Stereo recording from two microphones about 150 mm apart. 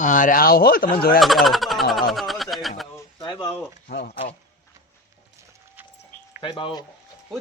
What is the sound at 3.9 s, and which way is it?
Speech, 90° left.